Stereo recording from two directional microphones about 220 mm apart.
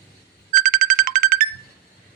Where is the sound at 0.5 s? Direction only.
40° right (ahead or behind).